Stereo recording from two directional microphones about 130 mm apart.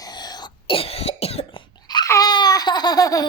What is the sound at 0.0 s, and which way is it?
Cough, 30° left (ahead or behind).